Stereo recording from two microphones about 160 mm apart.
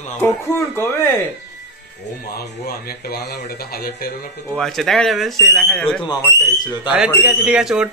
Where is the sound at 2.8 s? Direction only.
70° left (ahead or behind).